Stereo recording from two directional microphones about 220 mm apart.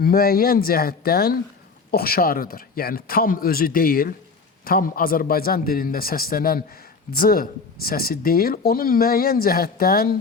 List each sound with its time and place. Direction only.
0.0 s speech: 40° left (ahead or behind)